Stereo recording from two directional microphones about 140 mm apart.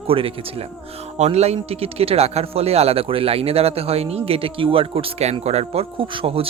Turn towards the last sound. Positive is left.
turn(degrees=-40)  # may be behind; listen again after turning